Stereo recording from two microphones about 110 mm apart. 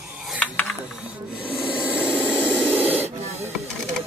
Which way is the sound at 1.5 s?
15° right (ahead or behind).